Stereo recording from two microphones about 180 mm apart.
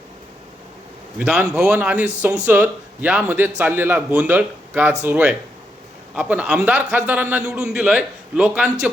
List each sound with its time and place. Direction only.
1.2 s a man's voice: 5° right (ahead or behind)